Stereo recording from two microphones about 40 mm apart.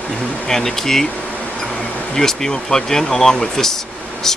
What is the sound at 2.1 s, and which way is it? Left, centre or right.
Speech, centre.